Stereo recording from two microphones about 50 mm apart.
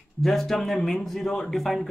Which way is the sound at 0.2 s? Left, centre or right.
Centre.